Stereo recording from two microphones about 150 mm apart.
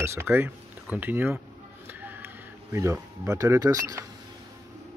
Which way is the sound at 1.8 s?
15° right (ahead or behind).